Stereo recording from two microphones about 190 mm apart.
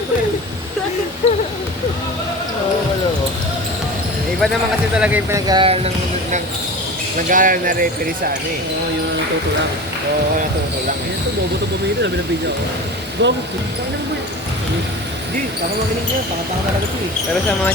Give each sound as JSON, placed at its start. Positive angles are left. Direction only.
{"t": 1.2, "sound": "a sound", "side_deg": 35}
{"t": 4.9, "sound": "speech", "side_deg": -10}
{"t": 5.5, "sound": "speech", "side_deg": -25}
{"t": 7.3, "sound": "speech", "side_deg": -45}
{"t": 13.2, "sound": "speech", "side_deg": -65}